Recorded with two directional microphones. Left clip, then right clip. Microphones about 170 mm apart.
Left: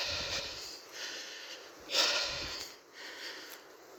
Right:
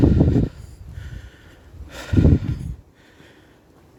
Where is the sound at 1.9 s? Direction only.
40° right (ahead or behind).